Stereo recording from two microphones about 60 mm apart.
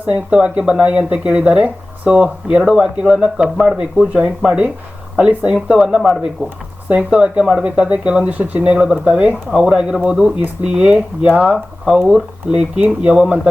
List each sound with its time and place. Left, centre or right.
0.0 s speech: right
5.6 s speech: centre
6.4 s speech: right
8.7 s speech: centre
12.0 s speech: centre